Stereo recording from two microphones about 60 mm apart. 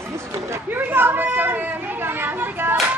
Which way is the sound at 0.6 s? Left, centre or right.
Right.